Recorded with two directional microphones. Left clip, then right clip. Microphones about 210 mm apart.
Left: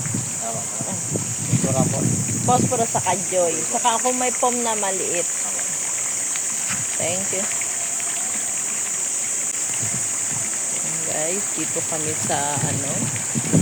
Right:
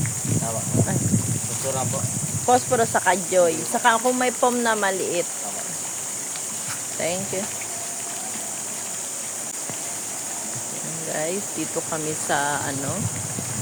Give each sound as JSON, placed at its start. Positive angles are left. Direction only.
{"t": 2.5, "sound": "speech", "side_deg": -25}
{"t": 12.3, "sound": "speech", "side_deg": -5}